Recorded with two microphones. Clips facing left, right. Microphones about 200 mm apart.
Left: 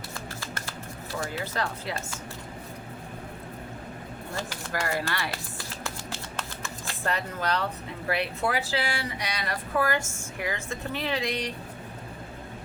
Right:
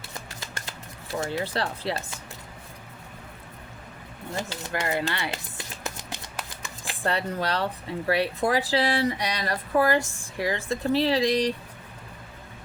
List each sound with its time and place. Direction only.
0.3 s shuffling cards: 20° right (ahead or behind)
1.2 s speech: 30° right (ahead or behind)
4.4 s music: 20° right (ahead or behind)
7.0 s speech: 30° right (ahead or behind)